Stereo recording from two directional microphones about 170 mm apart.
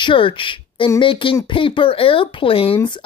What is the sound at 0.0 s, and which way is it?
Speech, 30° left (ahead or behind).